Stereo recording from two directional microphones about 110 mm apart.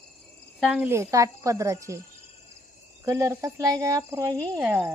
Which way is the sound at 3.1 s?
25° right (ahead or behind).